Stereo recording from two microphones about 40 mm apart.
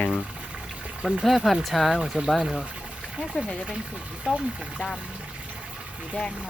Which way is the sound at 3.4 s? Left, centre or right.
Centre.